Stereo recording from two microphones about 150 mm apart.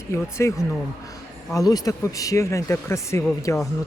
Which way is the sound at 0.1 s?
20° left (ahead or behind).